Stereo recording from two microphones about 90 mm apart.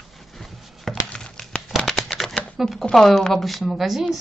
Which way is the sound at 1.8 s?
5° left (ahead or behind).